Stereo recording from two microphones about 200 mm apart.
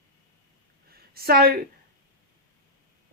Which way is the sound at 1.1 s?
50° right (ahead or behind).